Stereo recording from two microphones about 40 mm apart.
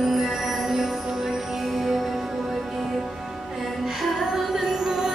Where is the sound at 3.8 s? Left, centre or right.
Centre.